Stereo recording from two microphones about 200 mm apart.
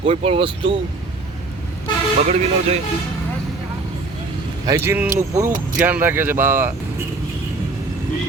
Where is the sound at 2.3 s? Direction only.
30° right (ahead or behind).